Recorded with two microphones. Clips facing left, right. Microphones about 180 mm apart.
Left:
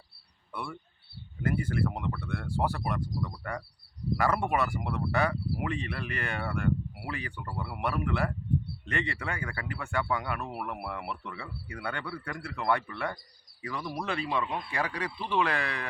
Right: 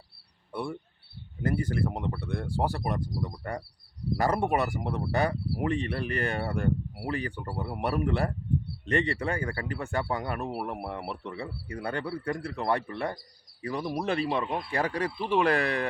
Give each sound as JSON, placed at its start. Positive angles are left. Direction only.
{"t": 0.5, "sound": "speech", "side_deg": -35}